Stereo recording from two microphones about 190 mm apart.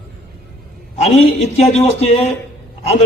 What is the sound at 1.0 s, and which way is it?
A man's voice, 35° left (ahead or behind).